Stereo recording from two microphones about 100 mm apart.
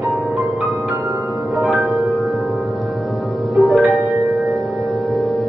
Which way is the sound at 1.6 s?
Centre (ahead or behind).